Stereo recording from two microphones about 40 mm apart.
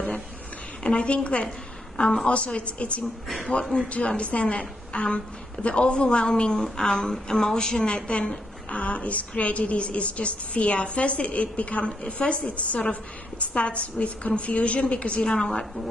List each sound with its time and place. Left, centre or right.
0.8 s a woman's voice: left
7.8 s a woman's voice: left